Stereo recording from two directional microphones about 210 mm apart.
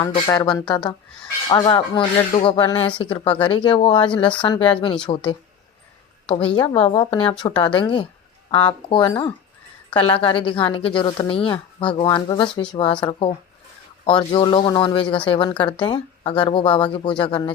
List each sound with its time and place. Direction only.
0.0 s a woman's voice: 20° left (ahead or behind)